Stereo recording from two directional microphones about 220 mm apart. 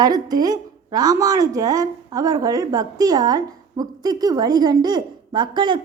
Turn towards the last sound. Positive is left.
turn(degrees=-20)  # may be behind; listen again after turning